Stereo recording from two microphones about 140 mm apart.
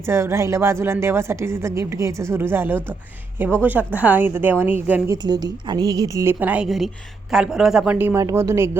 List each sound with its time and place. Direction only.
0.1 s a woman's voice: 20° right (ahead or behind)
5.0 s a woman's voice: 30° right (ahead or behind)